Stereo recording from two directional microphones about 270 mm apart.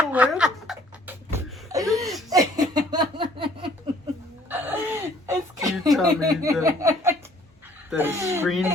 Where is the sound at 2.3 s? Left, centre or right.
Centre.